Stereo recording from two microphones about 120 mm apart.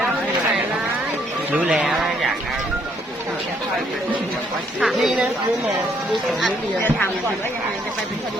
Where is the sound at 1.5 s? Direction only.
10° right (ahead or behind).